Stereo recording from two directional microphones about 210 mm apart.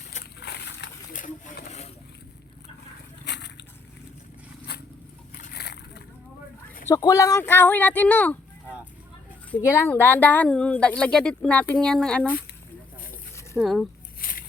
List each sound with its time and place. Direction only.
0.3 s a sound: 55° left (ahead or behind)
1.1 s a sound: 40° left (ahead or behind)
3.2 s boat: 55° left (ahead or behind)
4.7 s zipper: 50° left (ahead or behind)
5.5 s slosh: 50° left (ahead or behind)
6.8 s speech: 15° left (ahead or behind)
9.6 s speech: 10° left (ahead or behind)
13.6 s speech: centre (ahead or behind)
14.2 s a sound: 45° left (ahead or behind)